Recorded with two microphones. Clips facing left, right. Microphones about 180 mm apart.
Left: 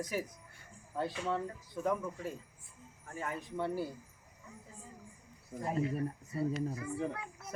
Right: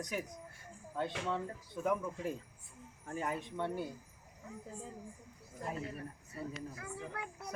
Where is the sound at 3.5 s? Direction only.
5° left (ahead or behind).